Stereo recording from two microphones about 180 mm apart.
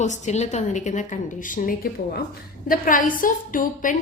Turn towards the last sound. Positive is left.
turn(degrees=50)  # may be behind; listen again after turning